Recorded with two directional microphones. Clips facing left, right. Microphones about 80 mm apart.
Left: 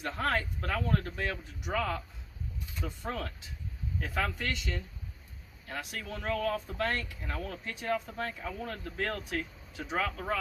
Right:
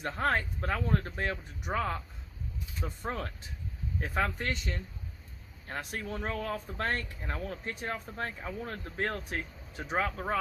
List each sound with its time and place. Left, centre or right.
0.0 s speech: right